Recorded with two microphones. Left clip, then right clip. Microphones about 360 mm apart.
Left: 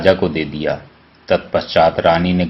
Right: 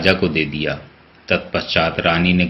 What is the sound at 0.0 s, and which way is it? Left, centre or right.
Speech, left.